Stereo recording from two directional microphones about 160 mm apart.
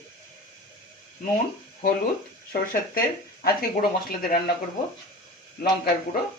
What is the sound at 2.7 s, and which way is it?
Speech, 60° left (ahead or behind).